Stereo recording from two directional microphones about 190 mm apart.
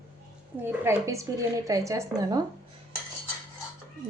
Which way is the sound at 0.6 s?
15° right (ahead or behind).